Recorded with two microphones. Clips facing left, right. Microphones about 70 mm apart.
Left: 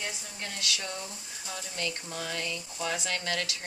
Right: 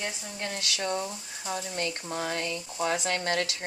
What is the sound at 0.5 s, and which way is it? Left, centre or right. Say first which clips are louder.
Speech: right 5 dB; right.